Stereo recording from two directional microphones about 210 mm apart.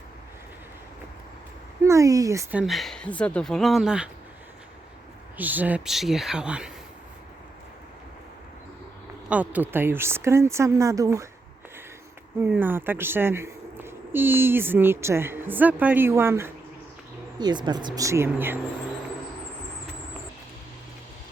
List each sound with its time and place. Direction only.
1.8 s speech: 15° right (ahead or behind)
5.4 s speech: 10° right (ahead or behind)
9.3 s speech: 5° right (ahead or behind)
12.4 s speech: 10° right (ahead or behind)